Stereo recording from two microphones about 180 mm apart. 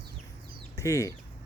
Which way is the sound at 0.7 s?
15° left (ahead or behind).